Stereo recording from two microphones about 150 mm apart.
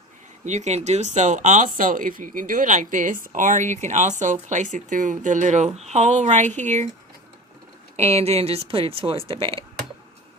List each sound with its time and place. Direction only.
0.4 s speech: 50° right (ahead or behind)
7.9 s speech: 45° right (ahead or behind)